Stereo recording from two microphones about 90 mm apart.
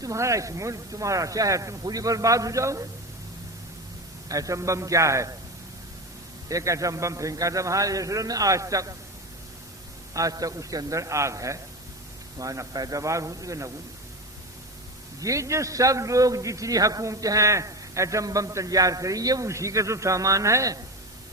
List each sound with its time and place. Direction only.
0.0 s a man's voice: 35° right (ahead or behind)
4.3 s a man's voice: 40° right (ahead or behind)
6.5 s a man's voice: 35° right (ahead or behind)
10.2 s a man's voice: 40° right (ahead or behind)
15.2 s a man's voice: 35° right (ahead or behind)